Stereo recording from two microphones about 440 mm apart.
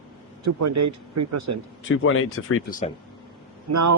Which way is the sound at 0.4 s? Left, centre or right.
Right.